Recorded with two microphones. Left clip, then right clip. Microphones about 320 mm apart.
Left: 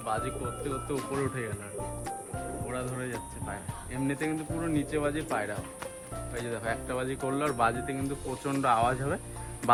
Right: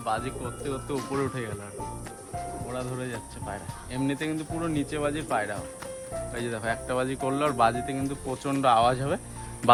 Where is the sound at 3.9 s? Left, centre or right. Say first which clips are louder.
Right 2 dB; right.